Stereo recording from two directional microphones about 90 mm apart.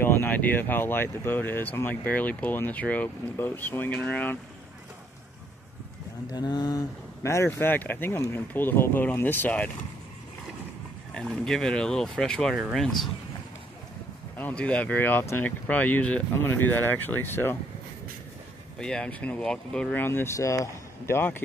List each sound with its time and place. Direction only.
0.0 s speech: 25° left (ahead or behind)
6.3 s speech: 55° left (ahead or behind); by 7.4 s 35° left (ahead or behind)
7.4 s speech: 20° left (ahead or behind)
11.4 s speech: 5° left (ahead or behind)
14.3 s speech: 15° left (ahead or behind)
18.8 s speech: 10° left (ahead or behind)
20.0 s speech: 25° left (ahead or behind)